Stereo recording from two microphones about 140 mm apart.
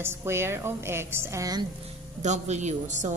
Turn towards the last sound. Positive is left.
turn(degrees=-55)  # may be behind; listen again after turning